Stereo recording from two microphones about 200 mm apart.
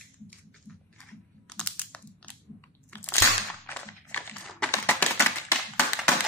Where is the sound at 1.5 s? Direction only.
5° left (ahead or behind).